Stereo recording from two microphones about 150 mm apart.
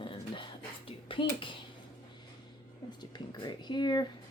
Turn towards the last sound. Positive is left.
turn(degrees=30)  # may be behind; listen again after turning